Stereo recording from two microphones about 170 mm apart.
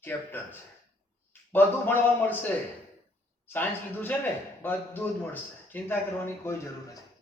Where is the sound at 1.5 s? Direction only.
10° left (ahead or behind).